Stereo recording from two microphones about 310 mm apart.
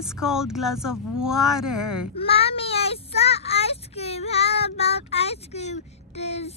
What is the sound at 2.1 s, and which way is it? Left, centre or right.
Speech, centre.